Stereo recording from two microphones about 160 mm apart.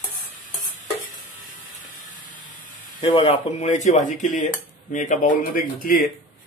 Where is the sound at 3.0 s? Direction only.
30° left (ahead or behind).